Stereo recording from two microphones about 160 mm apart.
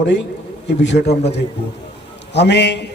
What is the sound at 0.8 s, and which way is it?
A man's voice, 90° left.